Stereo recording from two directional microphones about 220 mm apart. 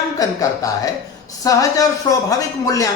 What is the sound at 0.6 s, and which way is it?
Speech, 15° left (ahead or behind).